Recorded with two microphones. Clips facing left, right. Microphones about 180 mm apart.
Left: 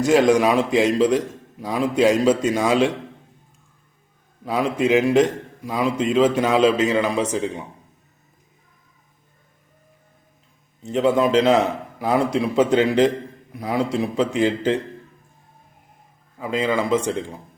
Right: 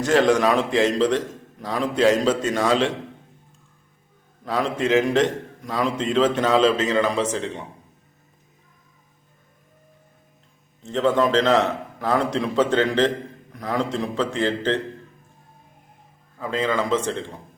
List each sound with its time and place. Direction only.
0.0 s a man's voice: 10° left (ahead or behind)
4.4 s a man's voice: 10° left (ahead or behind)
10.8 s a man's voice: 10° left (ahead or behind)
16.4 s a man's voice: 15° left (ahead or behind)